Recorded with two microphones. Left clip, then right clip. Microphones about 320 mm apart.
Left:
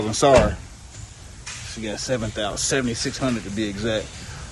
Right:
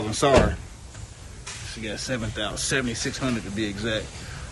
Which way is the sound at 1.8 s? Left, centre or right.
Centre.